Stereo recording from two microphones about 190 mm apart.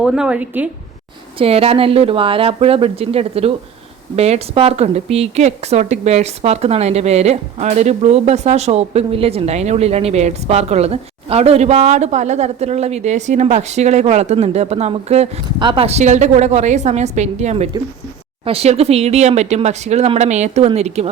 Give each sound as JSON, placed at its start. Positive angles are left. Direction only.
{"t": 0.0, "sound": "a woman's voice", "side_deg": -5}
{"t": 1.4, "sound": "a woman's voice", "side_deg": -30}